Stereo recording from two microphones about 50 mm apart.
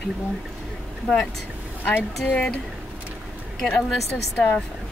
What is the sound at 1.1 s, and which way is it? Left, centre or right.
Speech, centre.